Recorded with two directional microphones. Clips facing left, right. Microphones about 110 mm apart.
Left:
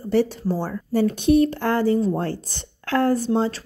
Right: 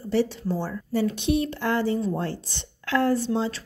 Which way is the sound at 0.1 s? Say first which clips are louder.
Left 4 dB; 50° left (ahead or behind).